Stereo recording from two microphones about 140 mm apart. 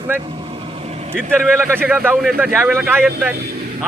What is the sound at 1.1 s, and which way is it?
Speech, 15° right (ahead or behind).